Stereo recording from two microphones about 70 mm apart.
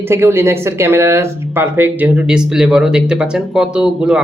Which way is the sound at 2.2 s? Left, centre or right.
Centre.